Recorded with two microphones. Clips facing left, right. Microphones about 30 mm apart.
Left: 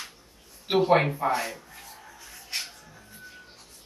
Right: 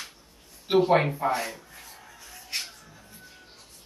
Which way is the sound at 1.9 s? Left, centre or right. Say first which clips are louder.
Left 1 dB; centre.